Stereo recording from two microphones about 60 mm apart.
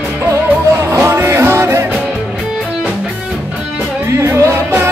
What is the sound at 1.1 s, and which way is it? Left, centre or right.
Music, right.